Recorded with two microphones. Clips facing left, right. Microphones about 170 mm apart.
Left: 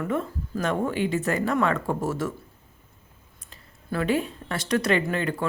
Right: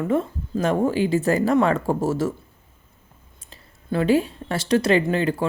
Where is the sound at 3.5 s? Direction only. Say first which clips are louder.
Right 5 dB; 30° right (ahead or behind).